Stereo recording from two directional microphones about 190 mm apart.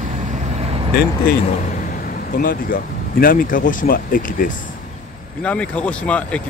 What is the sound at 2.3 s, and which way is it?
Speech, 50° left (ahead or behind).